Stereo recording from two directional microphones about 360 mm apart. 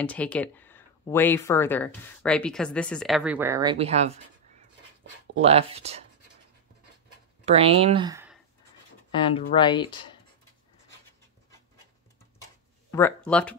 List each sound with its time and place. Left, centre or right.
0.0 s speech: centre
5.4 s speech: centre
7.4 s speech: centre
9.1 s speech: centre
12.9 s speech: centre